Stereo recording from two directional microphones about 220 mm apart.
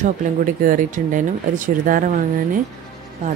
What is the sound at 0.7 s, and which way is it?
Speech, 35° right (ahead or behind).